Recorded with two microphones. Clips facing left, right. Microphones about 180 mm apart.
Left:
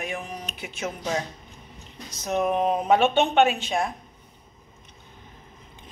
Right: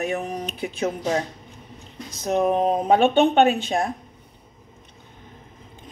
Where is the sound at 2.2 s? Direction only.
35° right (ahead or behind).